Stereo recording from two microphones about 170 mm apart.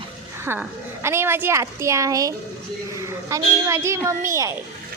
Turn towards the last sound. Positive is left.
turn(degrees=-15)  # may be behind; listen again after turning